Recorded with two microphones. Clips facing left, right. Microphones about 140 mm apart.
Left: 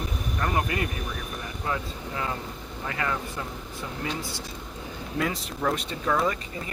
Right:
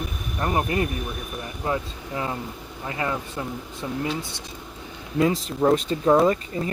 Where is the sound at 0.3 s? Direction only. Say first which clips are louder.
Right 4 dB; 25° right (ahead or behind).